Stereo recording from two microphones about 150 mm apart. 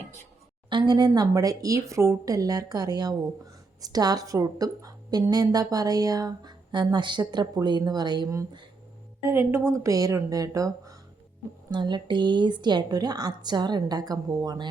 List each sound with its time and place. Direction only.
0.7 s speech: 30° right (ahead or behind)